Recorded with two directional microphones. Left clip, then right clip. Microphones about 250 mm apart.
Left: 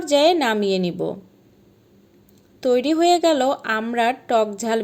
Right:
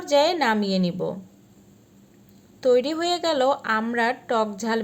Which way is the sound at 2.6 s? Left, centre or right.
Left.